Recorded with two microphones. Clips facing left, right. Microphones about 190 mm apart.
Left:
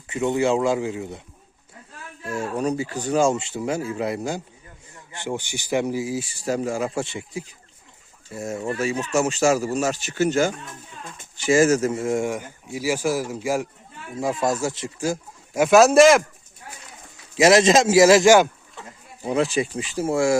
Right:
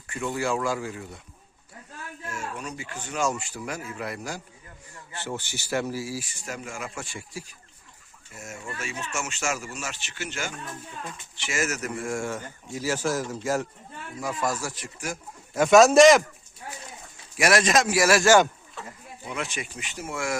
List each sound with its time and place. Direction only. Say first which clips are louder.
0.1 s speech: left 7 dB; 20° left (ahead or behind)
2.3 s speech: left 12 dB; 35° left (ahead or behind); by 6.2 s 20° left (ahead or behind)
6.2 s speech: left 12 dB; 35° left (ahead or behind)
8.3 s speech: left 11 dB; 35° left (ahead or behind); by 13.7 s 10° left (ahead or behind)
14.2 s speech: left 6 dB; 25° left (ahead or behind)
15.5 s speech: left 2 dB; 5° left (ahead or behind)
17.3 s speech: left 7 dB; 25° left (ahead or behind)
18.8 s a sound: right 1 dB; 20° left (ahead or behind)
19.2 s speech: left 12 dB; 35° left (ahead or behind)